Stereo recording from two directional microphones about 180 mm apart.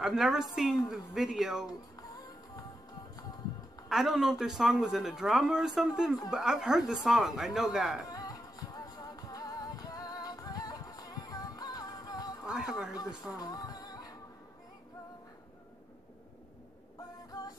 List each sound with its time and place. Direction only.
0.0 s speech: centre (ahead or behind)
3.9 s speech: centre (ahead or behind)
8.1 s music: 20° left (ahead or behind)
12.4 s speech: 5° right (ahead or behind)
13.4 s music: 20° left (ahead or behind)